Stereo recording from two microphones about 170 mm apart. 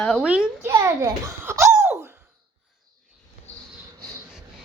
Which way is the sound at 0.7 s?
20° right (ahead or behind).